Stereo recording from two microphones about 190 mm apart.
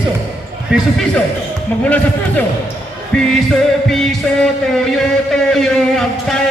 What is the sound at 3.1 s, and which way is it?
Music, 5° left (ahead or behind).